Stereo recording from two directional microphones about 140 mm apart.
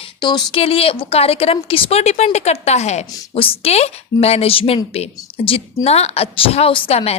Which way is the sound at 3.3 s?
40° left (ahead or behind).